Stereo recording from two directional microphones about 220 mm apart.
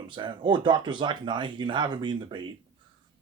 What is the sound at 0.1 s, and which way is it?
Speech, 20° right (ahead or behind).